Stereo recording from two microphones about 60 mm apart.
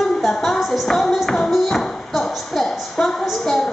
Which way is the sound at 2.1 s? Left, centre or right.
Centre.